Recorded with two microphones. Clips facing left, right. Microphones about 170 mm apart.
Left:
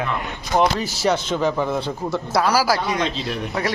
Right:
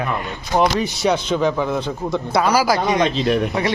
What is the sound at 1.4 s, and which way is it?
Speech, 10° left (ahead or behind).